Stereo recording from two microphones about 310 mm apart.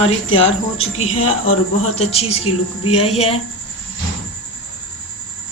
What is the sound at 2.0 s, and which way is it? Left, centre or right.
Speech, centre.